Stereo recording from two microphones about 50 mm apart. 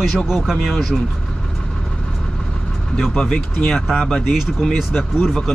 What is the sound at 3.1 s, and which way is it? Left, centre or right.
Speech, left.